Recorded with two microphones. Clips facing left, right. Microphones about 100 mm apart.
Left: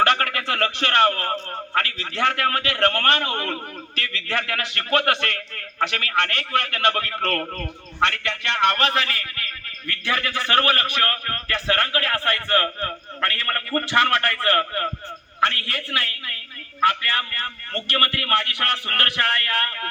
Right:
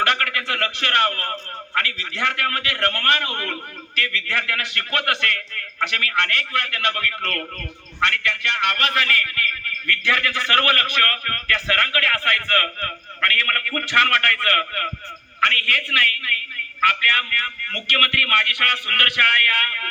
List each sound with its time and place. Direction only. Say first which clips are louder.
0.0 s a man's voice: left 2 dB; 35° left (ahead or behind)